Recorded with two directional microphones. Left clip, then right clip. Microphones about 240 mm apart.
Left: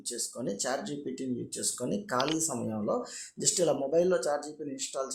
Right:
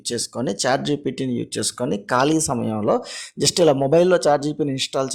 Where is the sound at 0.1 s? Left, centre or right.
Right.